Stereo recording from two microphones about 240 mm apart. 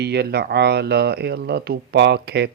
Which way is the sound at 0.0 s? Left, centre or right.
Right.